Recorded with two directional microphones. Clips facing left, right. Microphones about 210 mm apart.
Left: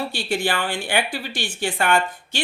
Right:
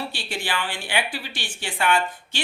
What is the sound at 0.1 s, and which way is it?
Speech, 45° left (ahead or behind).